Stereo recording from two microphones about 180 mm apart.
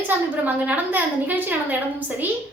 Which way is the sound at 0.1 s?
10° right (ahead or behind).